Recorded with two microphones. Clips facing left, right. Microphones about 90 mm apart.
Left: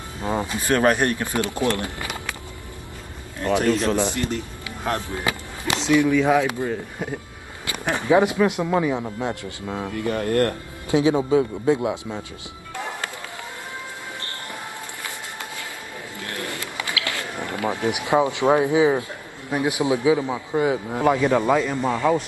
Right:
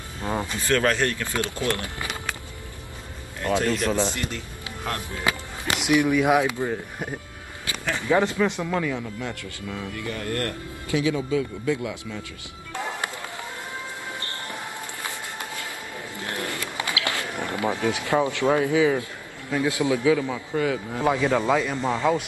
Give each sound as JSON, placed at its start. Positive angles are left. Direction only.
{"t": 0.2, "sound": "speech", "side_deg": 15}
{"t": 3.4, "sound": "speech", "side_deg": 20}
{"t": 5.9, "sound": "speech", "side_deg": -15}
{"t": 7.8, "sound": "speech", "side_deg": 20}
{"t": 16.2, "sound": "a sound", "side_deg": -20}
{"t": 16.4, "sound": "a sound", "side_deg": 20}
{"t": 16.9, "sound": "run", "side_deg": -20}
{"t": 17.6, "sound": "speech", "side_deg": 20}